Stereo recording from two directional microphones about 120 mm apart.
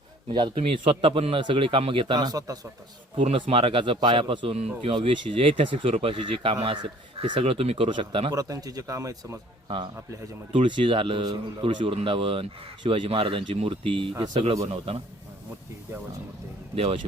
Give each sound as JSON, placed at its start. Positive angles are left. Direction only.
{"t": 0.3, "sound": "speech", "side_deg": -45}
{"t": 3.5, "sound": "speech", "side_deg": -50}
{"t": 5.3, "sound": "speech", "side_deg": -45}
{"t": 8.3, "sound": "a man's voice", "side_deg": -30}
{"t": 9.6, "sound": "speech", "side_deg": -45}
{"t": 14.3, "sound": "speech", "side_deg": -60}
{"t": 14.7, "sound": "speech", "side_deg": -50}
{"t": 16.7, "sound": "speech", "side_deg": -50}